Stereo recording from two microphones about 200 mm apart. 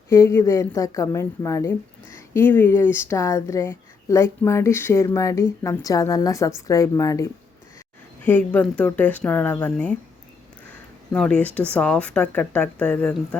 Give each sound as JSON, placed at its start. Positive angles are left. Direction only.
{"t": 0.1, "sound": "speech", "side_deg": 15}
{"t": 11.1, "sound": "speech", "side_deg": 5}